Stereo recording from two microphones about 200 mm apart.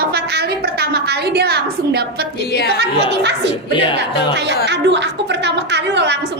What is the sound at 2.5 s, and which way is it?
Speech, 55° left (ahead or behind).